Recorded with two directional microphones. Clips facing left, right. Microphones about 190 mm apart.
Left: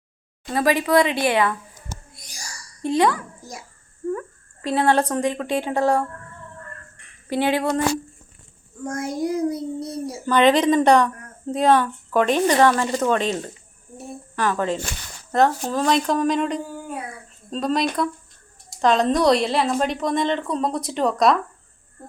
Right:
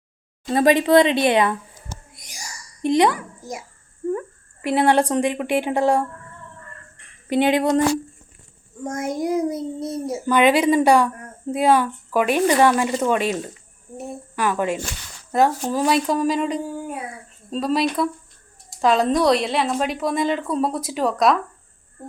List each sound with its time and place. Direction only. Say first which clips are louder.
0.4 s a child's voice: right 4 dB; 25° right (ahead or behind)
2.1 s a sound: right 1 dB; 20° right (ahead or behind)
4.6 s speech: right 2 dB; 15° right (ahead or behind)
6.9 s a sound: right 4 dB; 20° right (ahead or behind)
8.8 s a child's voice: right 1 dB; 20° right (ahead or behind)
10.2 s speech: even; 10° right (ahead or behind)
14.3 s a woman's voice: even; 10° right (ahead or behind)